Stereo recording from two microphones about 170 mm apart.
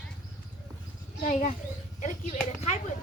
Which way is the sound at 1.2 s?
45° left (ahead or behind).